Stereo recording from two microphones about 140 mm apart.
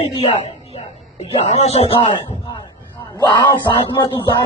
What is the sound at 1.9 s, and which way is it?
Music, 35° left (ahead or behind).